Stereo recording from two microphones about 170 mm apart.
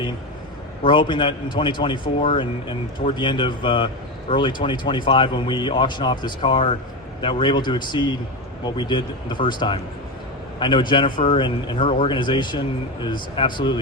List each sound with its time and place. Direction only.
0.9 s a man's voice: 30° left (ahead or behind)